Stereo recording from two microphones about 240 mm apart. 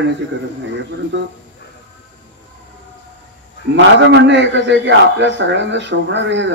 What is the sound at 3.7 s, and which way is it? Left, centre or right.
A man's voice, right.